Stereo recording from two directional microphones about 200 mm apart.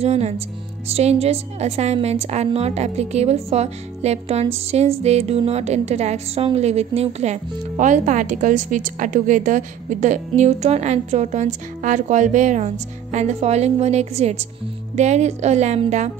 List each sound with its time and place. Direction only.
0.0 s a woman's voice: 30° right (ahead or behind)